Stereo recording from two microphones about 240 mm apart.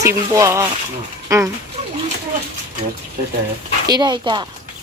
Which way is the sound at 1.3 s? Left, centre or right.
Centre.